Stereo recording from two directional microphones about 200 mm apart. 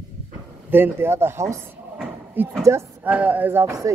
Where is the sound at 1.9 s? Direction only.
10° right (ahead or behind).